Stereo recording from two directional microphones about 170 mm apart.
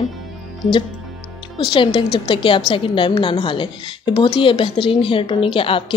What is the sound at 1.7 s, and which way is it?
A woman's voice, 30° left (ahead or behind).